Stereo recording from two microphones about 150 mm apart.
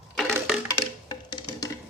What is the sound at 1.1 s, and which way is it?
Music, 30° left (ahead or behind).